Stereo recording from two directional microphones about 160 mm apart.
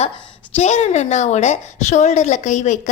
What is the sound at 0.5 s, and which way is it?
A woman's voice, 45° left (ahead or behind).